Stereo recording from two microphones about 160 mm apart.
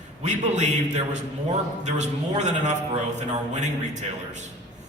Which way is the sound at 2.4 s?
45° right (ahead or behind).